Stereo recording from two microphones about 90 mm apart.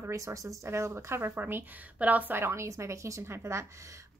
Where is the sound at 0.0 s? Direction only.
35° right (ahead or behind).